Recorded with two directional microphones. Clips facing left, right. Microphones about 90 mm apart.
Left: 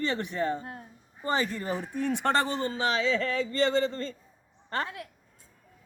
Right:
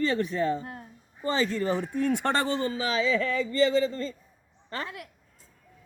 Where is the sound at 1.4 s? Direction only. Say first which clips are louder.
Right 5 dB; 15° left (ahead or behind).